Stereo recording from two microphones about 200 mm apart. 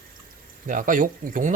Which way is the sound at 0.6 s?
40° right (ahead or behind).